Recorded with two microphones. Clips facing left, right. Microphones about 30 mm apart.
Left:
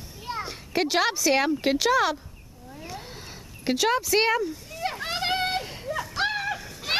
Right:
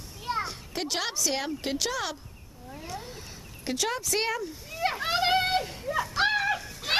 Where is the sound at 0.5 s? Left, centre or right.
Centre.